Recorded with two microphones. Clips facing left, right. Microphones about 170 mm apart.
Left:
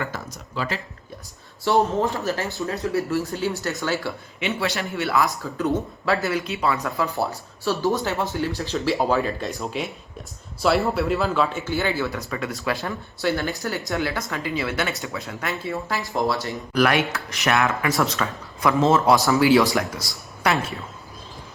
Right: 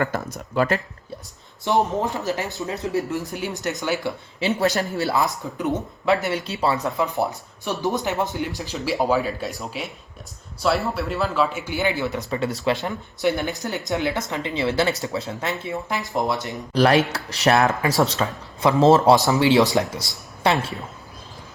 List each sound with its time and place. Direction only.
0.0 s speech: 55° right (ahead or behind)
1.9 s speech: 20° right (ahead or behind)
4.4 s speech: 40° right (ahead or behind)
5.0 s speech: 25° right (ahead or behind)
8.7 s speech: 5° right (ahead or behind)
11.5 s speech: 15° right (ahead or behind)
16.7 s speech: 30° right (ahead or behind)